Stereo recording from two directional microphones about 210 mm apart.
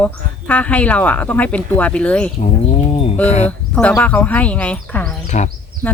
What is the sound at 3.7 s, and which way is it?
A woman's voice, 5° left (ahead or behind).